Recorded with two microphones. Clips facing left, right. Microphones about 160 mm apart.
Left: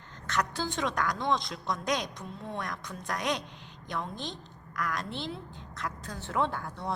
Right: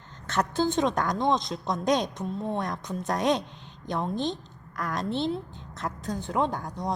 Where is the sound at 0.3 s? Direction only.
25° right (ahead or behind).